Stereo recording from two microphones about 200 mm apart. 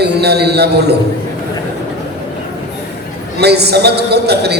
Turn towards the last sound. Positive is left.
turn(degrees=-55)  # may be behind; listen again after turning